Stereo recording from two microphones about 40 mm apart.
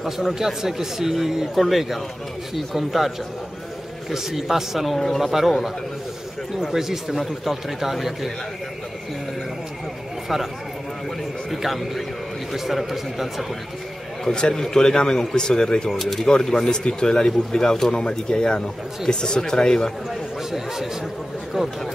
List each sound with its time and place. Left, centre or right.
0.3 s a man's voice: centre
4.1 s speech: centre
4.9 s speech: centre
5.2 s speech: centre
6.6 s a man's voice: centre
10.2 s speech: centre
11.5 s a man's voice: centre
14.2 s speech: left
16.0 s a man's voice: centre
16.3 s speech: centre
21.5 s speech: centre